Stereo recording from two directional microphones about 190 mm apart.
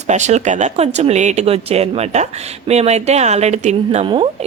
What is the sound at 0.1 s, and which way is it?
A woman's voice, 35° right (ahead or behind).